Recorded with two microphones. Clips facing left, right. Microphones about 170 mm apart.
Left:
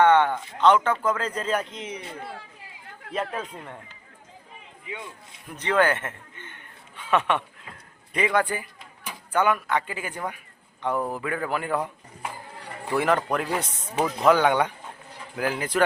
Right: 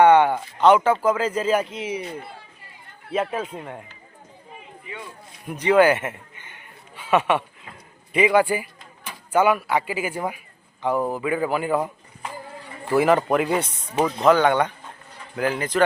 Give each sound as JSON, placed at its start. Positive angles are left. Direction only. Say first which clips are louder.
{"t": 0.0, "sound": "speech", "louder": "right 4 dB", "side_deg": -10}
{"t": 3.1, "sound": "speech", "louder": "right 5 dB", "side_deg": -5}
{"t": 5.5, "sound": "a sound", "louder": "right 6 dB", "side_deg": -10}
{"t": 8.1, "sound": "a man's voice", "louder": "right 6 dB", "side_deg": -10}
{"t": 12.9, "sound": "a man's voice", "louder": "right 5 dB", "side_deg": -5}
{"t": 13.9, "sound": "speech", "louder": "right 3 dB", "side_deg": -20}
{"t": 14.3, "sound": "a man's voice", "louder": "right 2 dB", "side_deg": 10}